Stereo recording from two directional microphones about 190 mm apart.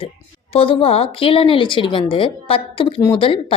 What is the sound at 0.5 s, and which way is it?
Speech, 30° left (ahead or behind).